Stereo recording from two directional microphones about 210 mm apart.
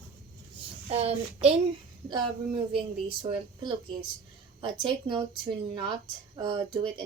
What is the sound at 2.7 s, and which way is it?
Speech, 25° right (ahead or behind).